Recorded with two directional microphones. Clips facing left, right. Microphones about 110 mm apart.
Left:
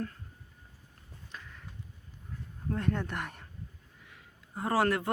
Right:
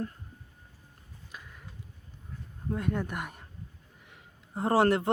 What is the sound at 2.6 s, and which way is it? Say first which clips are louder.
Speech: right 1 dB; 10° right (ahead or behind).